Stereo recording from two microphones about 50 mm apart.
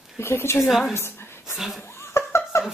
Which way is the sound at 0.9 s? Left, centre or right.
Left.